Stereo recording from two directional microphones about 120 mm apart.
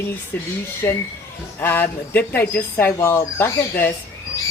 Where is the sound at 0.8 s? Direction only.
20° left (ahead or behind).